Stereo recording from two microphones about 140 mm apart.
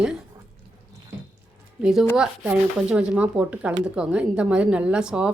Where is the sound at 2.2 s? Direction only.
5° right (ahead or behind).